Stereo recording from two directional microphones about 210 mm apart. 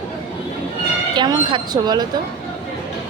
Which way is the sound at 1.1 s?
20° right (ahead or behind).